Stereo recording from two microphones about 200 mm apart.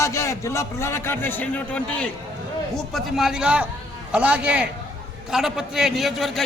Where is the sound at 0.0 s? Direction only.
15° left (ahead or behind).